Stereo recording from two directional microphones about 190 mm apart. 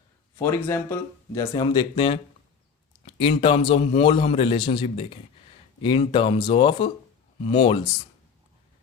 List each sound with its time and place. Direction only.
0.3 s a man's voice: 15° left (ahead or behind)